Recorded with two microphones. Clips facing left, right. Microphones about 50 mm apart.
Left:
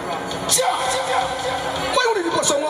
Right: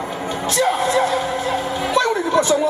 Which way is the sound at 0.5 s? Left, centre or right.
Right.